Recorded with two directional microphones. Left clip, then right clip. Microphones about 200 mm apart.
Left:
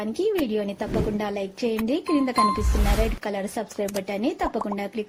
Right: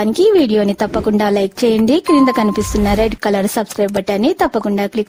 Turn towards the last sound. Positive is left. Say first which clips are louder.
# right 11 dB
turn(degrees=-60)  # may be behind; listen again after turning